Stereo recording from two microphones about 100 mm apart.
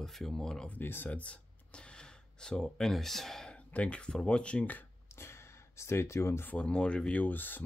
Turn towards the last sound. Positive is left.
turn(degrees=20)  # may be behind; listen again after turning